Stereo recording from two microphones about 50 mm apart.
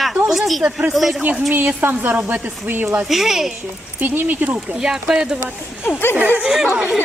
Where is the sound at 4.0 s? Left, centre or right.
Right.